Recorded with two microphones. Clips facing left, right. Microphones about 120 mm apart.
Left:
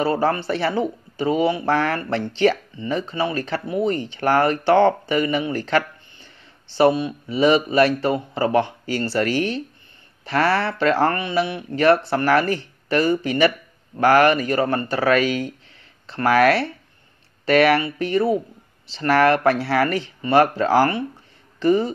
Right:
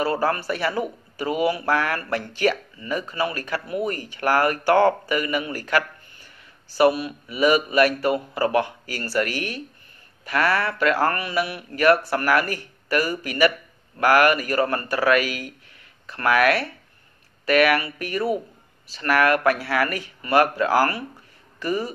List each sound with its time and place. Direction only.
0.0 s speech: 25° left (ahead or behind)